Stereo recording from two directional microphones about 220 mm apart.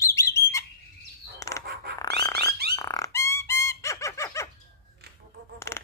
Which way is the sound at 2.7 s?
15° left (ahead or behind).